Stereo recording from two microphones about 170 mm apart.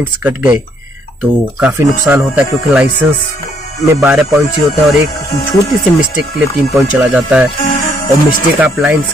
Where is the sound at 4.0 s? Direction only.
15° right (ahead or behind).